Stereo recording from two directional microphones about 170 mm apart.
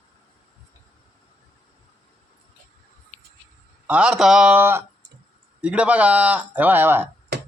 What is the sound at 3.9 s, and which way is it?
A man's voice, 5° right (ahead or behind).